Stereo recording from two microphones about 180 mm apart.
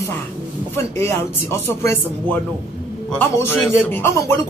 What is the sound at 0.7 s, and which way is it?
Speech, 15° left (ahead or behind).